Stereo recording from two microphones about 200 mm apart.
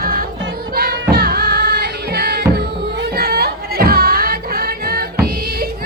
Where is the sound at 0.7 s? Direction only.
50° right (ahead or behind).